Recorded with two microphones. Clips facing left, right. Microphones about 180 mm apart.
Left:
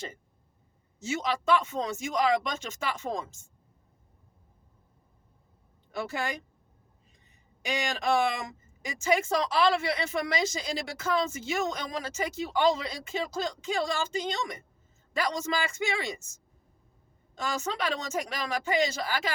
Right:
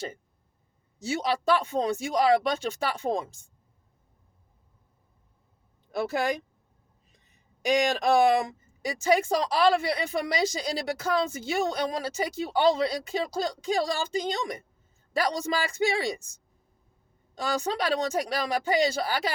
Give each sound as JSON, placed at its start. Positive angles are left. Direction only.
{"t": 0.9, "sound": "speech", "side_deg": -35}
{"t": 7.7, "sound": "speech", "side_deg": -35}